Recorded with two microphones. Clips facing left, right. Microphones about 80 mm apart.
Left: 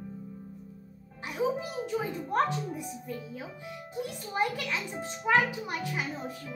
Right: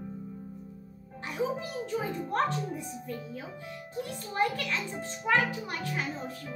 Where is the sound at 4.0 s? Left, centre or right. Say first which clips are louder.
Right 1 dB; centre.